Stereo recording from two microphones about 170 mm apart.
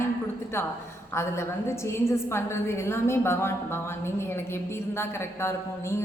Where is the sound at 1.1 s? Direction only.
15° left (ahead or behind).